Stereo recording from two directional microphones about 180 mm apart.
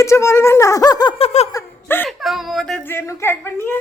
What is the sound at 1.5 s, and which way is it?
Laughter, 15° left (ahead or behind).